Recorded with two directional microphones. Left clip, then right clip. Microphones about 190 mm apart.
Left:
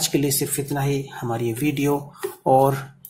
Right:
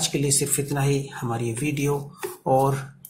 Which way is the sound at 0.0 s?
15° left (ahead or behind).